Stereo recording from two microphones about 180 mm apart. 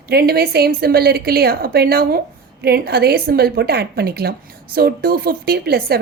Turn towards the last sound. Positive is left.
turn(degrees=-60)  # may be behind; listen again after turning